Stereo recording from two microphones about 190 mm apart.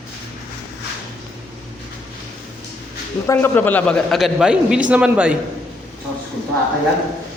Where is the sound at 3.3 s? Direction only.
10° left (ahead or behind); by 5.3 s 5° right (ahead or behind).